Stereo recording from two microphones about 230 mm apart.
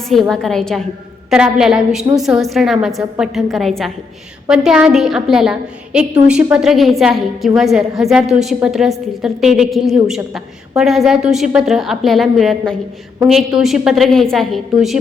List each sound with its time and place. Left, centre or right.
0.1 s a woman's voice: centre